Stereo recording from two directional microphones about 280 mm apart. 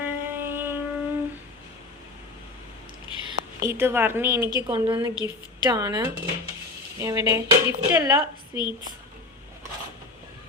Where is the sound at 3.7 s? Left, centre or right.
Centre.